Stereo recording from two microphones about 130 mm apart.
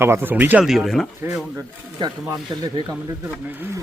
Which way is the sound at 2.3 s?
30° right (ahead or behind).